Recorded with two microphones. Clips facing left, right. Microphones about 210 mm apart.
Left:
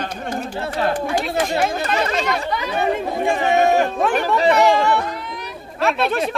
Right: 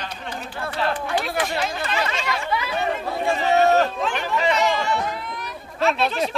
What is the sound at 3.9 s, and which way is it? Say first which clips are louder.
Chatter: left 6 dB; 60° left (ahead or behind).